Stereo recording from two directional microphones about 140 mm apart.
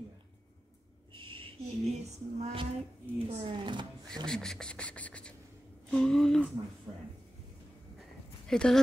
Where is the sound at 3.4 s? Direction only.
35° right (ahead or behind).